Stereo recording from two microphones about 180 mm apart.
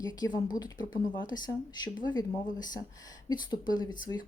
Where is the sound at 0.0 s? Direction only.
20° left (ahead or behind).